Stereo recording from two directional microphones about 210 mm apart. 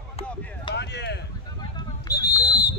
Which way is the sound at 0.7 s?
55° left (ahead or behind).